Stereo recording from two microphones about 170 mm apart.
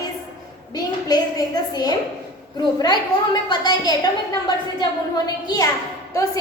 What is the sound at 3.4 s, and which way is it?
A woman's voice, 25° left (ahead or behind).